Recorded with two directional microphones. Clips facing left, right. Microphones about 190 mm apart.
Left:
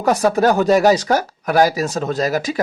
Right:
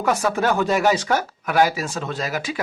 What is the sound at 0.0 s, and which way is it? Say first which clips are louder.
Speech: left 5 dB; 40° left (ahead or behind).